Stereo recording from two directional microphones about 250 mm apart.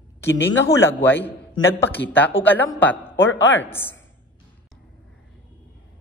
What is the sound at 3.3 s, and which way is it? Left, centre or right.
Speech, left.